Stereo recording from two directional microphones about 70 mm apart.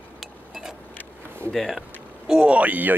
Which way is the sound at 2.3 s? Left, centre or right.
Centre.